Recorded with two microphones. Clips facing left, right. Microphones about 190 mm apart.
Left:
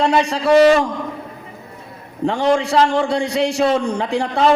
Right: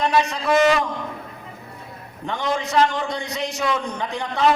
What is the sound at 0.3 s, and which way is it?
Speech, 35° left (ahead or behind).